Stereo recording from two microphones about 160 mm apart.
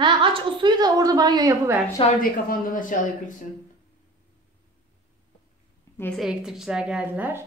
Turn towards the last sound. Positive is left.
turn(degrees=-10)  # may be behind; listen again after turning